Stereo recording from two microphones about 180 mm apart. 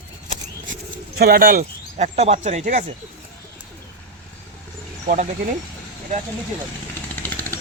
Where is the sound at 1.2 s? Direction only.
55° right (ahead or behind).